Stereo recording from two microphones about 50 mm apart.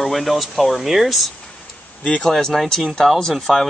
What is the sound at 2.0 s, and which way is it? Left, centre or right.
Speech, centre.